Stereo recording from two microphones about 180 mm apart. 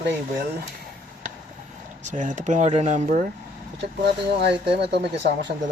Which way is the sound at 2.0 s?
45° right (ahead or behind).